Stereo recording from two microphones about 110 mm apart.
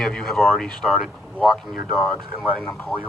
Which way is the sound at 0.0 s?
5° left (ahead or behind).